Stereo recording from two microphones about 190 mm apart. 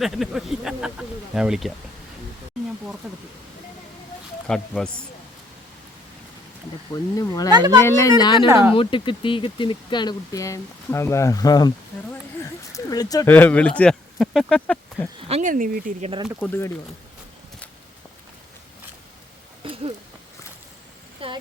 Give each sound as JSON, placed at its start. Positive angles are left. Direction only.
{"t": 0.0, "sound": "speech", "side_deg": 0}
{"t": 4.4, "sound": "speech", "side_deg": 5}
{"t": 6.9, "sound": "speech", "side_deg": 20}
{"t": 7.5, "sound": "speech", "side_deg": -20}
{"t": 7.8, "sound": "speech", "side_deg": 15}
{"t": 8.4, "sound": "speech", "side_deg": -15}
{"t": 8.7, "sound": "speech", "side_deg": 30}
{"t": 12.7, "sound": "speech", "side_deg": 20}
{"t": 15.3, "sound": "speech", "side_deg": -40}
{"t": 16.2, "sound": "speech", "side_deg": -5}
{"t": 16.5, "sound": "speech", "side_deg": 15}
{"t": 19.6, "sound": "a sound", "side_deg": -30}
{"t": 21.2, "sound": "speech", "side_deg": -30}